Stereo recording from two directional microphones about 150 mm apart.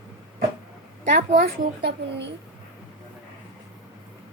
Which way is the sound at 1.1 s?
90° right.